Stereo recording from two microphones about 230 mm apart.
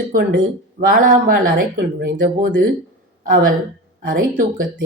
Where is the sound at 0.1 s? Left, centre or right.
Right.